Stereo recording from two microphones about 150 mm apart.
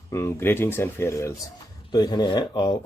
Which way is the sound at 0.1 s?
20° left (ahead or behind).